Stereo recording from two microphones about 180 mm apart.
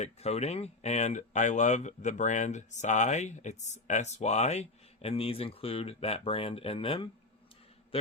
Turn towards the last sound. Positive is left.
turn(degrees=30)  # may be behind; listen again after turning